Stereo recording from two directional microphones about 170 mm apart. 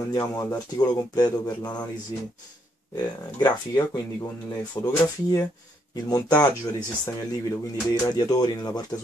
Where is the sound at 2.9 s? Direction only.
25° left (ahead or behind).